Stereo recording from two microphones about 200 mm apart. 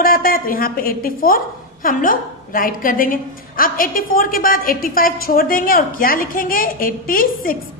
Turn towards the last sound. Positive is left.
turn(degrees=45)  # may be behind; listen again after turning